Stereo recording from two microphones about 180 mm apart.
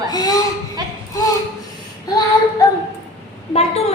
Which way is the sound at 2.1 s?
20° left (ahead or behind).